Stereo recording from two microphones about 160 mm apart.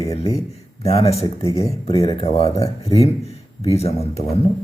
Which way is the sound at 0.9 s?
40° left (ahead or behind).